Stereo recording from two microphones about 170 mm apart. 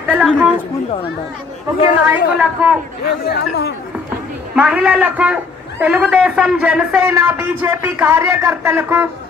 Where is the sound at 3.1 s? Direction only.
70° left (ahead or behind).